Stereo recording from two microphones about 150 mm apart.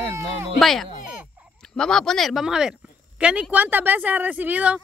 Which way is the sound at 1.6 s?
5° left (ahead or behind).